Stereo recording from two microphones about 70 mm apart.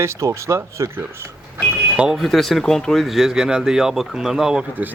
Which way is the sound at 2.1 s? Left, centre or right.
Centre.